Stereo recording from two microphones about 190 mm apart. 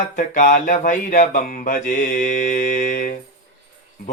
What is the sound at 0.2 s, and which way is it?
Speech, 45° left (ahead or behind).